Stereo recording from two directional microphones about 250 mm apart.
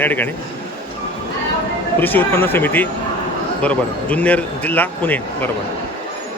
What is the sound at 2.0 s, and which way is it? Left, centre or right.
A man's voice, centre.